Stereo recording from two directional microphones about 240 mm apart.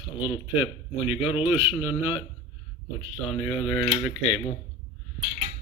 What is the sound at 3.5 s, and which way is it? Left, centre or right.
Speech, left.